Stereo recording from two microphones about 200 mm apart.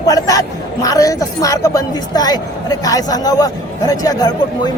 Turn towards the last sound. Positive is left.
turn(degrees=20)  # may be behind; listen again after turning